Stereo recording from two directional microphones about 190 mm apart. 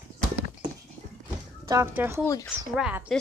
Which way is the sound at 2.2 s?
15° left (ahead or behind).